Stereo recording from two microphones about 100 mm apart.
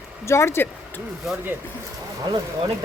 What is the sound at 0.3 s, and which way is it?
Speech, 25° left (ahead or behind).